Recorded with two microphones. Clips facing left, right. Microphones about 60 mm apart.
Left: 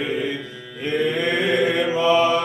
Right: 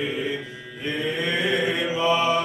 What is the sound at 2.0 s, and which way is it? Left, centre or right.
Mantra, left.